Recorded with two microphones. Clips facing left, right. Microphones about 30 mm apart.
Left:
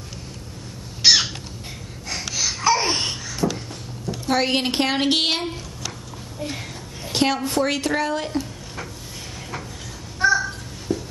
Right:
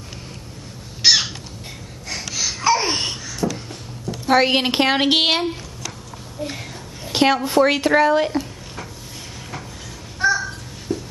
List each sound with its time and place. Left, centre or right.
1.0 s crow: centre
2.3 s babbling: centre
3.4 s a sound: centre
4.3 s a woman's voice: centre
6.4 s speech: centre
7.1 s a woman's voice: centre
10.1 s babbling: centre